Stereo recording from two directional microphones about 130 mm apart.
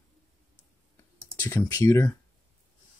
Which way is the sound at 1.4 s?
15° left (ahead or behind).